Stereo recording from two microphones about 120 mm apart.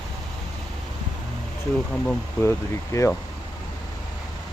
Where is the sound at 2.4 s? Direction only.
25° left (ahead or behind).